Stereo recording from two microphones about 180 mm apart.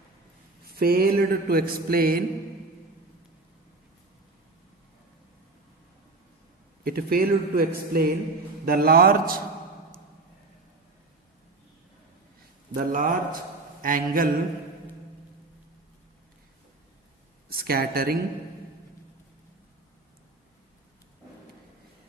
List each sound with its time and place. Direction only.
0.8 s mantra: 55° right (ahead or behind)
6.8 s mantra: 55° right (ahead or behind)
12.7 s a man's voice: 50° right (ahead or behind)
17.5 s speech: 55° right (ahead or behind)